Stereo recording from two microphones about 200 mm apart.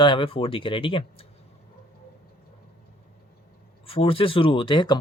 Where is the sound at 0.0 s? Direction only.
25° left (ahead or behind).